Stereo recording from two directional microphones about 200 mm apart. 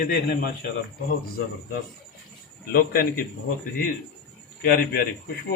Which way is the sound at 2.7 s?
45° left (ahead or behind).